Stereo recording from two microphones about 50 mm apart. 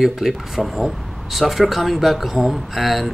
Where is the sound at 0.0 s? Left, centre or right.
Centre.